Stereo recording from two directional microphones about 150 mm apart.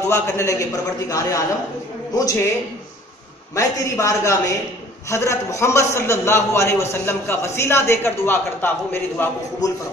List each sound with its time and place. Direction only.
0.1 s a man's voice: 20° left (ahead or behind)
3.5 s a man's voice: 20° left (ahead or behind)